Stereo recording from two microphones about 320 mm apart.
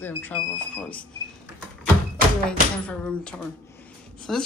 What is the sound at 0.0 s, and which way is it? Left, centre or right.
Speech, centre.